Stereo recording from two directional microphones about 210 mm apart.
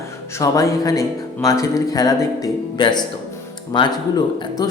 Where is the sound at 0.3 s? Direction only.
15° left (ahead or behind).